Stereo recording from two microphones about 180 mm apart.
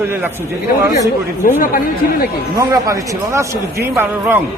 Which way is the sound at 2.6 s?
20° right (ahead or behind).